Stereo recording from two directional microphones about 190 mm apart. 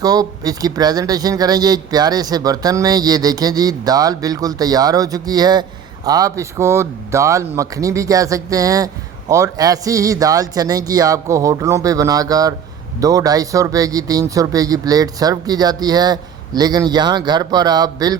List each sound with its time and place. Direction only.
0.0 s speech: 20° right (ahead or behind)